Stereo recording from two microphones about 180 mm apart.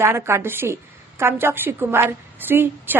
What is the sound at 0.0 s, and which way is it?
A woman's voice, 15° right (ahead or behind).